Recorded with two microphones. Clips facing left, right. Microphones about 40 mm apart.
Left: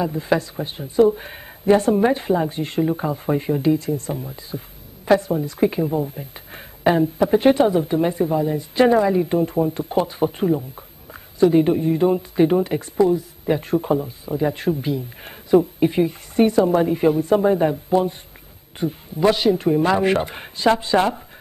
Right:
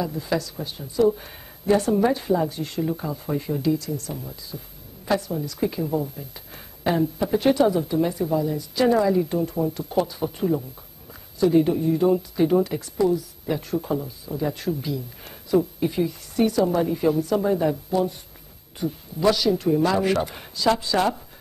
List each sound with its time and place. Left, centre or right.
0.0 s speech: left